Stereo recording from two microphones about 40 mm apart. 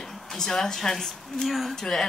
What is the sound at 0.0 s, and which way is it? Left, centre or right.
Speech, centre.